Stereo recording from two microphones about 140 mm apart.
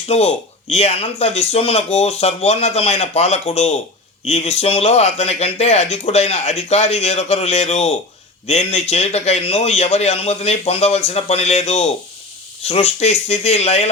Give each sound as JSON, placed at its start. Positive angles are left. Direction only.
{"t": 0.1, "sound": "speech", "side_deg": 50}